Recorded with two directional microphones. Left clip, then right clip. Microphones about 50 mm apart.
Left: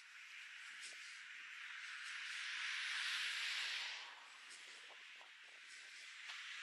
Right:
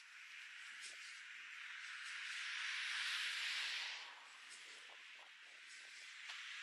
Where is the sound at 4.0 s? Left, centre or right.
Centre.